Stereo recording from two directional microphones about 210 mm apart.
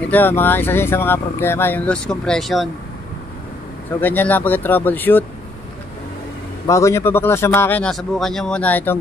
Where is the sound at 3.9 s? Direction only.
10° left (ahead or behind).